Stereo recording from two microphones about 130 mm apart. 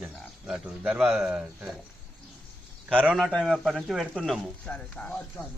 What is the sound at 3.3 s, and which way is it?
Speech, 5° left (ahead or behind).